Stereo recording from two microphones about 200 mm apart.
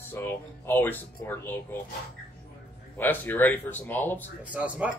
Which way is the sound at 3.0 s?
10° left (ahead or behind).